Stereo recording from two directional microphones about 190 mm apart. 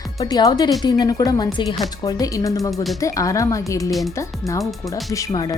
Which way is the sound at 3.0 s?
15° left (ahead or behind).